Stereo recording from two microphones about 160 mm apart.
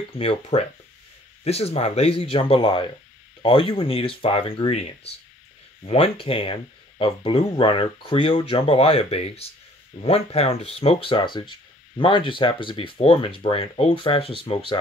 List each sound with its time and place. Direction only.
0.2 s speech: 35° left (ahead or behind)